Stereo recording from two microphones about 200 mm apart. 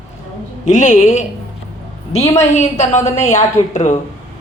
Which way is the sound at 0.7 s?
40° left (ahead or behind).